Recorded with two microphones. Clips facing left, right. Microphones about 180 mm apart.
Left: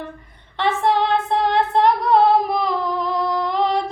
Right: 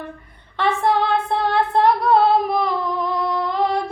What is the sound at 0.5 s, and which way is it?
Female singing, 20° left (ahead or behind).